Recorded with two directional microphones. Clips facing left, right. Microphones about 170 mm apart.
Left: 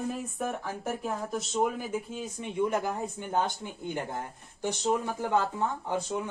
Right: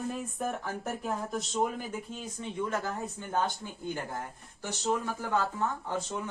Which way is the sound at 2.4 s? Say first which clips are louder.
Left 4 dB; 15° left (ahead or behind).